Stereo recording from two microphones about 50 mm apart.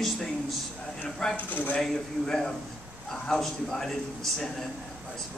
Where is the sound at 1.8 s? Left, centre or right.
Centre.